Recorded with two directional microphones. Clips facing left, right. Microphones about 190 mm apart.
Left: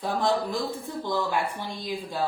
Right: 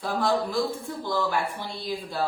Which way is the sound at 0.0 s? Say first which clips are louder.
Even; 20° left (ahead or behind).